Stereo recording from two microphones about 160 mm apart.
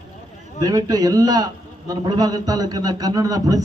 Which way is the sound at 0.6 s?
25° right (ahead or behind).